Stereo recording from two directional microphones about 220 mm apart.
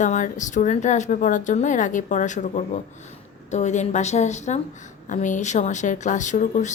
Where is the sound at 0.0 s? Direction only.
35° left (ahead or behind).